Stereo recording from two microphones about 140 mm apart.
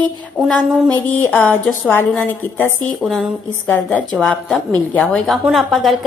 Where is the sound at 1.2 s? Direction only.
15° left (ahead or behind).